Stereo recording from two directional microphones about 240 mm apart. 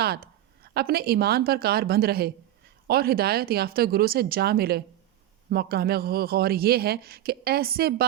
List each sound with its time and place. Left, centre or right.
0.0 s speech: right